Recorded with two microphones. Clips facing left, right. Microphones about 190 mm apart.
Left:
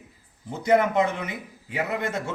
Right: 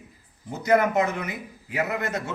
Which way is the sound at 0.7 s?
25° left (ahead or behind).